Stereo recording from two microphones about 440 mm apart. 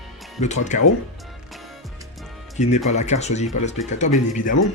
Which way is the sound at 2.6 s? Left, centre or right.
Centre.